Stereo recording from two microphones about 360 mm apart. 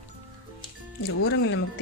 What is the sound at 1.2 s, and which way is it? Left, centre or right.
Speech, left.